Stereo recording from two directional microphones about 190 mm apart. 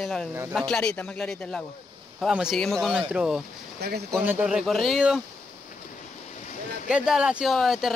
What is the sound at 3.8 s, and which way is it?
Speech, 55° right (ahead or behind).